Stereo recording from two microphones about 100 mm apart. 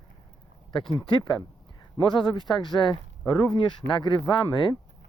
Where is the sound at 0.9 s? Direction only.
50° left (ahead or behind).